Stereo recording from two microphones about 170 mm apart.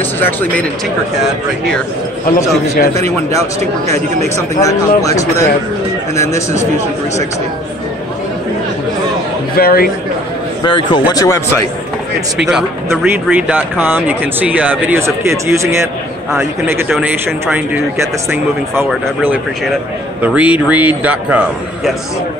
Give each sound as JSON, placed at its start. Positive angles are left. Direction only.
{"t": 0.0, "sound": "speech", "side_deg": 10}
{"t": 3.8, "sound": "speech", "side_deg": -40}
{"t": 4.6, "sound": "speech", "side_deg": 20}
{"t": 9.6, "sound": "speech", "side_deg": 60}
{"t": 10.6, "sound": "speech", "side_deg": 25}
{"t": 12.4, "sound": "speech", "side_deg": -5}
{"t": 16.9, "sound": "speech", "side_deg": -10}